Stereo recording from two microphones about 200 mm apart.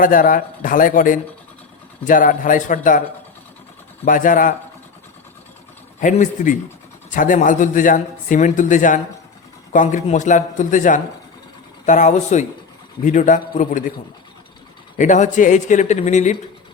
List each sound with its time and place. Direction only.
0.0 s speech: 45° left (ahead or behind)
4.0 s speech: 40° left (ahead or behind)
6.0 s speech: 40° left (ahead or behind)
14.9 s speech: 40° left (ahead or behind)